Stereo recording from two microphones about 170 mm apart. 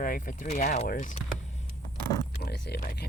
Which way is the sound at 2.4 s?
75° left (ahead or behind).